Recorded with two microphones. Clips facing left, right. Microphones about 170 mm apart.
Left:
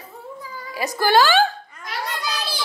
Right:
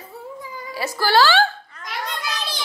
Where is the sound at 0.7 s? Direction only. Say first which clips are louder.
Left 1 dB; 15° left (ahead or behind).